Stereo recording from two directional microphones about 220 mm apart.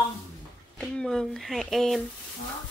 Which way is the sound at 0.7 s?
5° left (ahead or behind).